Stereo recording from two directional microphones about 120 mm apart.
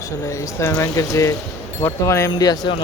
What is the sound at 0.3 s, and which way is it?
Speech, 25° left (ahead or behind).